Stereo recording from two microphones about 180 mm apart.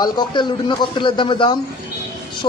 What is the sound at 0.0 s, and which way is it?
A man's voice, 25° left (ahead or behind).